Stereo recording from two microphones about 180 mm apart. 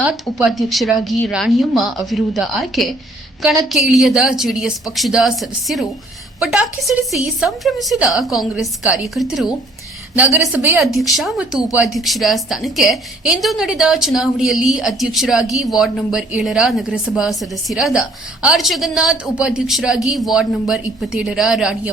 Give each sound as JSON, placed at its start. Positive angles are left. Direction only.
{"t": 0.0, "sound": "a woman's voice", "side_deg": -5}
{"t": 10.3, "sound": "a woman's voice", "side_deg": -10}